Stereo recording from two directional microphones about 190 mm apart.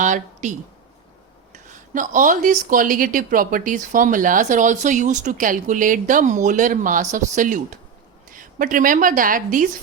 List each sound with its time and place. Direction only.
0.0 s speech: 40° right (ahead or behind)
1.5 s a woman's voice: 40° right (ahead or behind)